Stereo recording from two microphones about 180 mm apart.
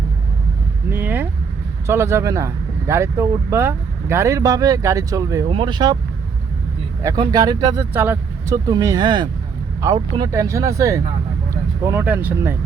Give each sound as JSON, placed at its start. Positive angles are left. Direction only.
{"t": 0.9, "sound": "vehicle", "side_deg": -10}
{"t": 1.9, "sound": "speech", "side_deg": -15}
{"t": 7.0, "sound": "speech", "side_deg": -20}